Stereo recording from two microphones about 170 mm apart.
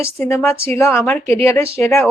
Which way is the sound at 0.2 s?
15° left (ahead or behind).